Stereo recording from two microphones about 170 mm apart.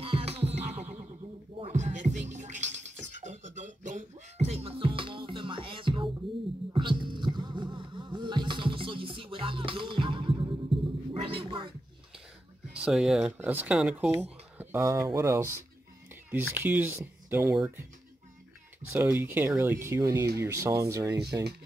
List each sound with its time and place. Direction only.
0.0 s music: 35° right (ahead or behind)
10.7 s a sound: centre (ahead or behind)
11.2 s gargling: 30° right (ahead or behind)
12.8 s speech: 5° right (ahead or behind)
18.9 s speech: 15° right (ahead or behind)